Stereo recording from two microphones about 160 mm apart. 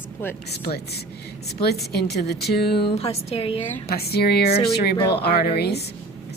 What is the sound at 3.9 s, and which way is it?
A woman's voice, 80° left.